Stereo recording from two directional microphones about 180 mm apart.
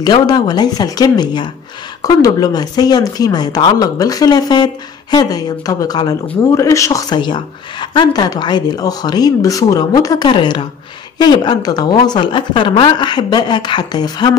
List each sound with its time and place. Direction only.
0.0 s a woman's voice: 25° left (ahead or behind)